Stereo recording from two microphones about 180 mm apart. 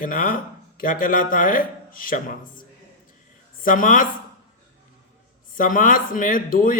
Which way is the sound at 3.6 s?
50° left (ahead or behind).